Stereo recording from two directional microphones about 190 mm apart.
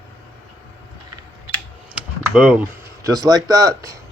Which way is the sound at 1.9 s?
5° right (ahead or behind).